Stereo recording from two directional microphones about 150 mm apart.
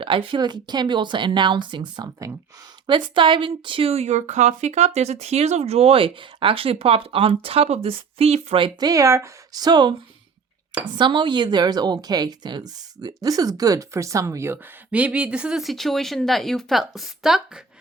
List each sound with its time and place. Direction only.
0.0 s speech: 35° right (ahead or behind)
10.9 s speech: 30° right (ahead or behind); by 17.6 s 5° right (ahead or behind)